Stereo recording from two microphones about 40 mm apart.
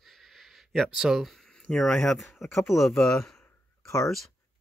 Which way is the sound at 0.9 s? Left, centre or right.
Centre.